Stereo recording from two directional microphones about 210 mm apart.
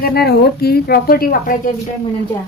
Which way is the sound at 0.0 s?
50° left (ahead or behind).